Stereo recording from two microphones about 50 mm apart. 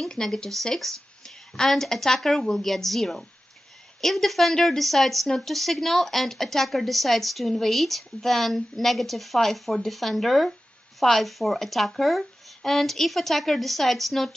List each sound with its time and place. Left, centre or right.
0.0 s speech: centre